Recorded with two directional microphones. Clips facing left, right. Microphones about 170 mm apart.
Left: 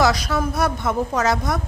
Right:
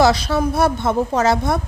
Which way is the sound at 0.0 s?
30° right (ahead or behind).